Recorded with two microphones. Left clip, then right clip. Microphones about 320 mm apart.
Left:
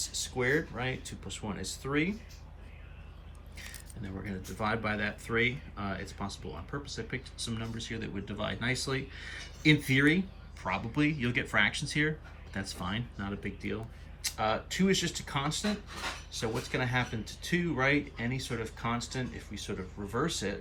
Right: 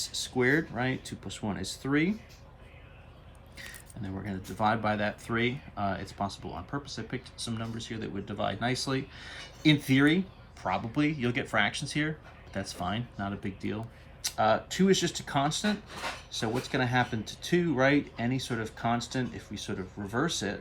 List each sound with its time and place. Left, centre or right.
0.2 s speech: centre
4.0 s speech: centre